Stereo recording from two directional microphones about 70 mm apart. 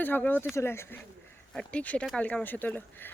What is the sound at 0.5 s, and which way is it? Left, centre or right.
Speech, left.